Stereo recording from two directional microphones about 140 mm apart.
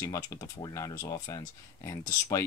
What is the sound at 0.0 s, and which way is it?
Speech, 20° left (ahead or behind).